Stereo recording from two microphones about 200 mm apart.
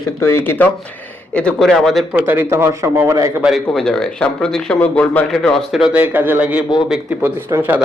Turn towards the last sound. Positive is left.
turn(degrees=-10)  # may be behind; listen again after turning